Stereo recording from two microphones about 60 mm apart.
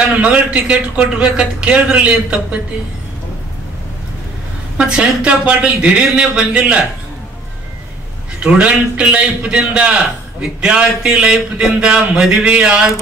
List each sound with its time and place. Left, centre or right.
0.2 s speech: centre
4.7 s speech: centre
8.4 s speech: centre